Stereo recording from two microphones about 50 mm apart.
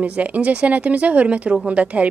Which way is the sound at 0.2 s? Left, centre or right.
Right.